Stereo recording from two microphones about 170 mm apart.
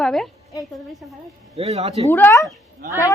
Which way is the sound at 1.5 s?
40° right (ahead or behind).